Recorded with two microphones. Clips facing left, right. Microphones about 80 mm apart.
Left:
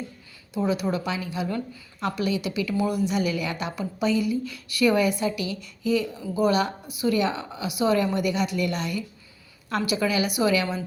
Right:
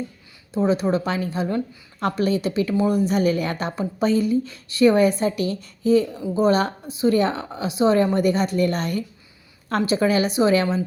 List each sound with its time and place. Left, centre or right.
0.5 s a woman's voice: right